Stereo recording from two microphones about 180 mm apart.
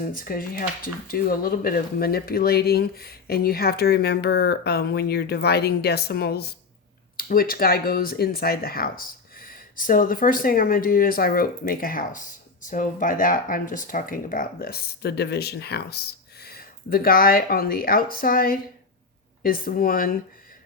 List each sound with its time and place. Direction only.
0.0 s speech: 50° left (ahead or behind)